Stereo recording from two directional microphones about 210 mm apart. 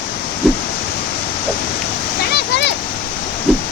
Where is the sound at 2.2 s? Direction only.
50° left (ahead or behind).